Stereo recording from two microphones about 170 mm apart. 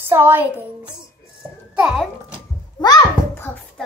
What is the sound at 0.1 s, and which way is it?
Speech, 10° right (ahead or behind).